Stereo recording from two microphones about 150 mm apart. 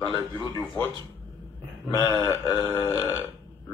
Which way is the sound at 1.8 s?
30° left (ahead or behind).